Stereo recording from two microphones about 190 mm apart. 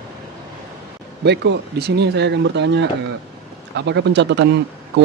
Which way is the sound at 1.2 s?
65° right (ahead or behind).